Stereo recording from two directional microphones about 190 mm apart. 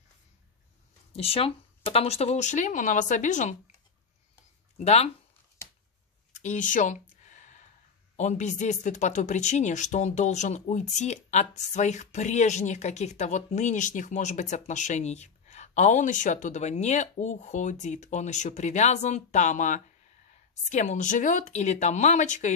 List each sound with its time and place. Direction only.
1.1 s speech: 30° left (ahead or behind)
4.7 s speech: 35° left (ahead or behind)
6.4 s a sound: 40° left (ahead or behind)
8.2 s speech: 40° left (ahead or behind)